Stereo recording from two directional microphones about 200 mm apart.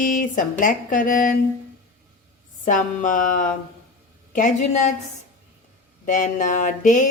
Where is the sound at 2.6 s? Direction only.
40° left (ahead or behind).